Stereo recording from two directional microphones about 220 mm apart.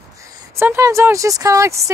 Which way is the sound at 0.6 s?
15° right (ahead or behind).